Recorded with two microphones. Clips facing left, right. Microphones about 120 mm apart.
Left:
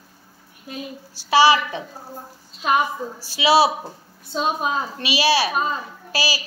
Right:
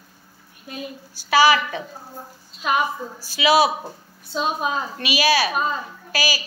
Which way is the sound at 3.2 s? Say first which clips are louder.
Left 1 dB; 30° left (ahead or behind).